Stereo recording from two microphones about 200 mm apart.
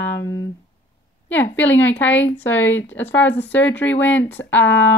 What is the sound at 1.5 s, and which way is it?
Speech, 10° left (ahead or behind).